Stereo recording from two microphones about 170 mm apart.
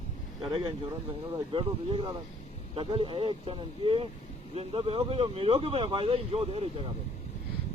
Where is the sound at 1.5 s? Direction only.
30° right (ahead or behind).